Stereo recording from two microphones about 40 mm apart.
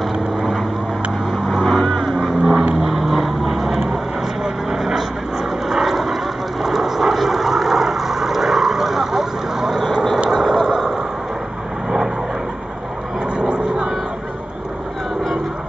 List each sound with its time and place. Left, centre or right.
0.1 s vehicle: centre
1.5 s vehicle: centre
2.1 s vehicle: centre
10.3 s a sound: centre
13.4 s vehicle: right